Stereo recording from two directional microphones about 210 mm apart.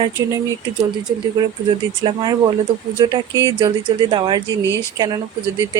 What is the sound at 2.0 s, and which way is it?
A woman's voice, 20° right (ahead or behind).